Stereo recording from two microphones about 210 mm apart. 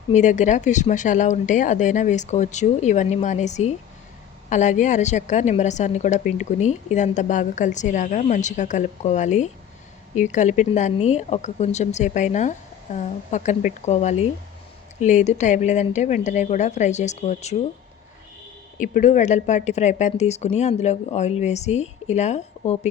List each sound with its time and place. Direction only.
0.1 s a woman's voice: 35° left (ahead or behind)
18.8 s a woman's voice: 40° left (ahead or behind)